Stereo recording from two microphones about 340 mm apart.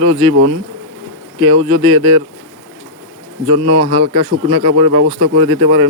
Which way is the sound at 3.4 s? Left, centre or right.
Centre.